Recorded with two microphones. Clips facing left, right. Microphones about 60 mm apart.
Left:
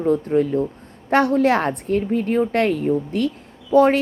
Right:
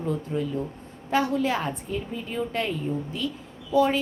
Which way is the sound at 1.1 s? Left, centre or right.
Left.